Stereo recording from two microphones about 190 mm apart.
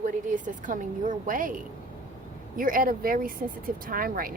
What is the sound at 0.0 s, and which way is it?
A woman's voice, 45° right (ahead or behind).